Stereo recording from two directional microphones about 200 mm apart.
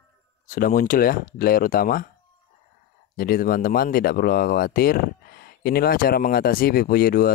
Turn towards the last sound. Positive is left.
turn(degrees=45)  # may be behind; listen again after turning